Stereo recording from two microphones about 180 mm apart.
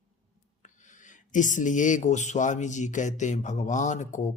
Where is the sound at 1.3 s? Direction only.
45° left (ahead or behind).